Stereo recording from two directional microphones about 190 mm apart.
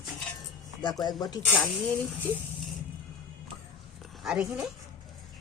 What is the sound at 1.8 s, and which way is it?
Speech, 5° left (ahead or behind).